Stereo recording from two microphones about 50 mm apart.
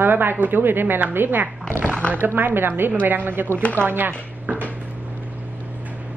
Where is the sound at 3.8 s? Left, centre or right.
Right.